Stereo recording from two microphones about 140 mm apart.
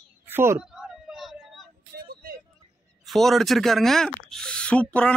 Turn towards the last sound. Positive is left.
turn(degrees=10)  # may be behind; listen again after turning